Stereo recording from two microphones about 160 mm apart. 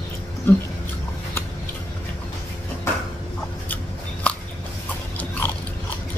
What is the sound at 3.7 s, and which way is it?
Shuffling cards, 10° left (ahead or behind).